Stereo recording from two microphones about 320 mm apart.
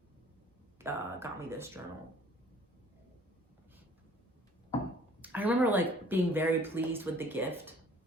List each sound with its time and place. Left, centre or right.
0.8 s speech: centre
5.2 s speech: centre